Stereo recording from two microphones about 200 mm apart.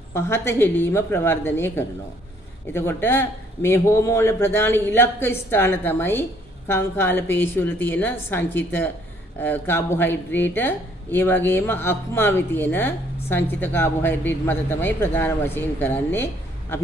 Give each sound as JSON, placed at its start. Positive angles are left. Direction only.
{"t": 0.1, "sound": "a man's voice", "side_deg": 15}